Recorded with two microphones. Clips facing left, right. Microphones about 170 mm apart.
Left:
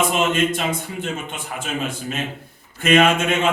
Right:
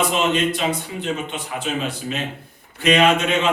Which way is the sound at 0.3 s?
45° left (ahead or behind).